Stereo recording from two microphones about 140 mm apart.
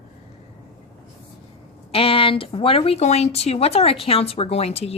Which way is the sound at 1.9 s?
40° left (ahead or behind).